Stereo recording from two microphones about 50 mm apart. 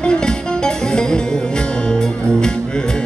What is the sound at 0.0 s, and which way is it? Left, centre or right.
Music, centre.